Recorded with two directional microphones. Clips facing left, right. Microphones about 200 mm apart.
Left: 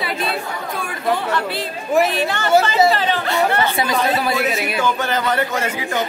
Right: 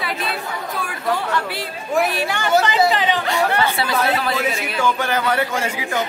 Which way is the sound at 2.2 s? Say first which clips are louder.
Left 2 dB; 10° right (ahead or behind).